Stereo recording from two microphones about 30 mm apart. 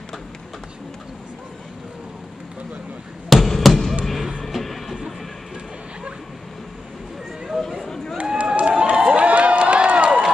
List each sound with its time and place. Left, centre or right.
3.3 s basketball bounce: centre
4.0 s music: centre
7.5 s a sound: centre
7.9 s run: centre
8.5 s a sound: right
9.0 s crowd: right
9.8 s run: right